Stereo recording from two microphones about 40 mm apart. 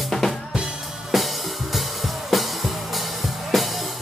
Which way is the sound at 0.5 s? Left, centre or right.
Centre.